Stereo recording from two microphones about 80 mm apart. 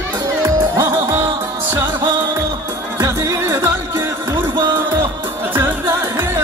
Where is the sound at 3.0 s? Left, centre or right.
Right.